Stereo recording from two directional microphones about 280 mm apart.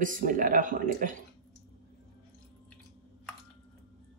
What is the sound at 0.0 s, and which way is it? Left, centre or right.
Speech, right.